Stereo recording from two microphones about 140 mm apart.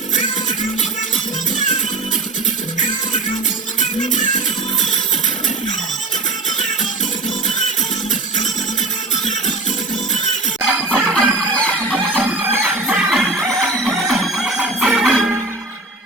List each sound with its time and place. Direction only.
3.8 s music: 65° left (ahead or behind)
9.1 s music: 60° left (ahead or behind)
10.8 s music: centre (ahead or behind)
12.2 s music: 15° right (ahead or behind)
12.9 s music: centre (ahead or behind)